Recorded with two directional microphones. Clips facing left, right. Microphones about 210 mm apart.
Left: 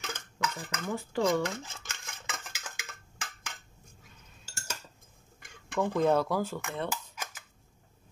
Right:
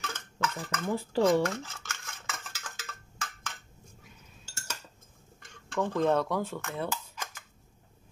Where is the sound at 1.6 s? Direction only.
15° left (ahead or behind).